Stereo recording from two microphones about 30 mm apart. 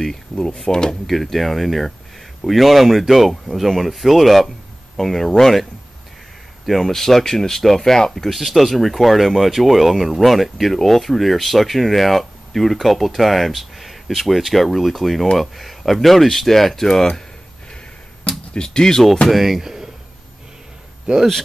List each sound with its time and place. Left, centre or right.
0.0 s speech: centre
1.3 s speech: centre
6.8 s speech: centre
18.6 s speech: left
19.3 s speech: centre
21.1 s a man's voice: right